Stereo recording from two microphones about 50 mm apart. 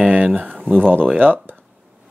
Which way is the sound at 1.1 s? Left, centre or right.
Right.